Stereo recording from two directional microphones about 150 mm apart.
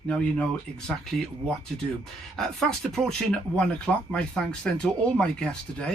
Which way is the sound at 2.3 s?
5° left (ahead or behind).